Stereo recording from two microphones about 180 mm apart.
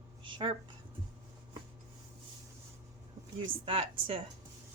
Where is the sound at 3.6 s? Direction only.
30° right (ahead or behind).